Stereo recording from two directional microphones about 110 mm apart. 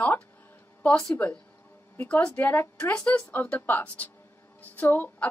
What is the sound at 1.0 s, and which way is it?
A woman's voice, 15° left (ahead or behind).